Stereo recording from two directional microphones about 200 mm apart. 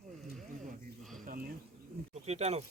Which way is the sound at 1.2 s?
45° right (ahead or behind).